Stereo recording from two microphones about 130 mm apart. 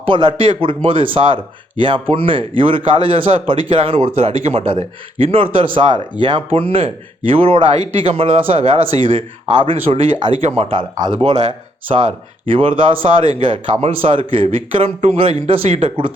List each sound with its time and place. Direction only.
0.0 s a man's voice: 40° right (ahead or behind)
11.9 s a man's voice: 50° right (ahead or behind)